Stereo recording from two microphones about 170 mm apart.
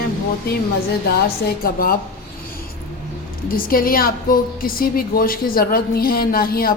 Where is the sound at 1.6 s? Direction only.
60° left (ahead or behind).